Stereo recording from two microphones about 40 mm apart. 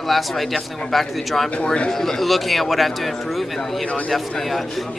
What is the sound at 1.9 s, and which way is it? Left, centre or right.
Speech, centre.